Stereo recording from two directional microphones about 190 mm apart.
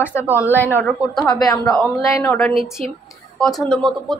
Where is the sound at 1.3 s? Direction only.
20° left (ahead or behind).